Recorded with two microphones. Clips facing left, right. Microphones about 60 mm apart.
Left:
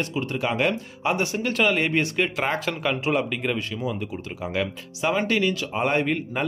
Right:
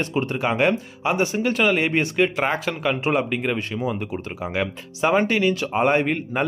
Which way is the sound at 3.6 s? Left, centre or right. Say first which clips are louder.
Right 3 dB; right.